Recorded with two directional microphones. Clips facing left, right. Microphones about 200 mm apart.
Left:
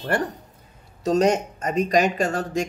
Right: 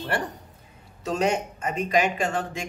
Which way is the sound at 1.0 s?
40° left (ahead or behind).